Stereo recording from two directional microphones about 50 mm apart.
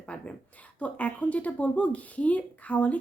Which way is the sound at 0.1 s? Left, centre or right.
Left.